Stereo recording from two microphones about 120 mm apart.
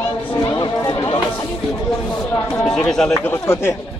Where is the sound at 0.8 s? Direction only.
30° left (ahead or behind).